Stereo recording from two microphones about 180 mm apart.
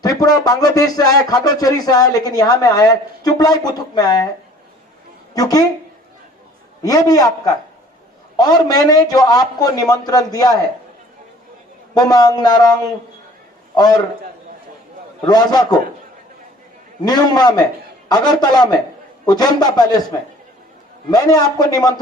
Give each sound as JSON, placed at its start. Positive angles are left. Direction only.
{"t": 0.0, "sound": "speech", "side_deg": 20}
{"t": 5.3, "sound": "a woman's voice", "side_deg": 20}
{"t": 6.8, "sound": "speech", "side_deg": 20}
{"t": 11.9, "sound": "speech", "side_deg": 20}
{"t": 13.7, "sound": "speech", "side_deg": 20}
{"t": 15.3, "sound": "speech", "side_deg": 20}
{"t": 17.1, "sound": "speech", "side_deg": 20}
{"t": 21.1, "sound": "speech", "side_deg": 20}